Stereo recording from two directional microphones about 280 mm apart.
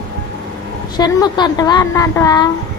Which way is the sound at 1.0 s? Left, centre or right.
Centre.